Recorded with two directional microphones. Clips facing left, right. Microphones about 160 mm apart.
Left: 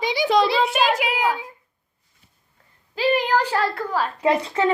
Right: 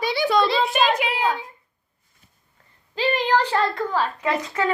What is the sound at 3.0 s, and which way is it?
A child's voice, 10° left (ahead or behind).